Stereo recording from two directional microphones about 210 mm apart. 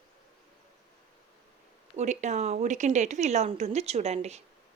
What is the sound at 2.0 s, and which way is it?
A woman's voice, 35° right (ahead or behind).